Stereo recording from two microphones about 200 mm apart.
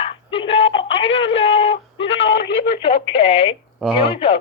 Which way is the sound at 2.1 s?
65° left (ahead or behind).